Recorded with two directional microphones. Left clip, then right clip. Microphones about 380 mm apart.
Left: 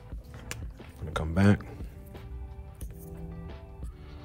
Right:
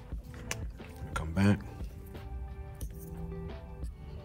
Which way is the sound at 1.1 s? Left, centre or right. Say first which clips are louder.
Left 5 dB; centre.